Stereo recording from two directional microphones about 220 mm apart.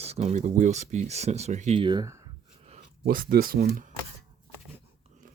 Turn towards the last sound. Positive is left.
turn(degrees=-45)  # may be behind; listen again after turning